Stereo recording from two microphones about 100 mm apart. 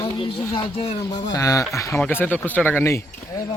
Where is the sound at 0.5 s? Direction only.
75° left (ahead or behind).